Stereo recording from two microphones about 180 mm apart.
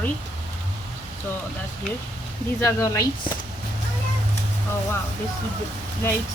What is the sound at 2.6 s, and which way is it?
Speech, 20° left (ahead or behind).